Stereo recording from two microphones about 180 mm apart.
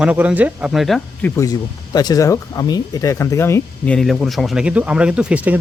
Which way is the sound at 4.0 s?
Centre (ahead or behind).